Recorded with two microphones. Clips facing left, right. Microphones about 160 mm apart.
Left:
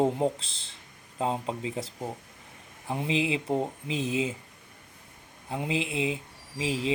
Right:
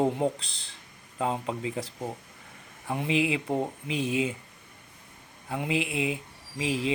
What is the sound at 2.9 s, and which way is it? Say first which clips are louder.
Speech: right 1 dB; 30° left (ahead or behind).